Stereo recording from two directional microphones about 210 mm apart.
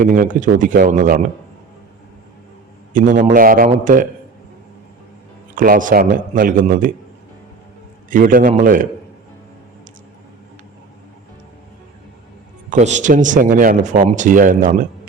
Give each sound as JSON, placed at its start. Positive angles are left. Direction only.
{"t": 0.0, "sound": "speech", "side_deg": -40}
{"t": 2.9, "sound": "speech", "side_deg": -40}
{"t": 5.5, "sound": "speech", "side_deg": -40}
{"t": 8.1, "sound": "speech", "side_deg": -40}
{"t": 12.7, "sound": "speech", "side_deg": -35}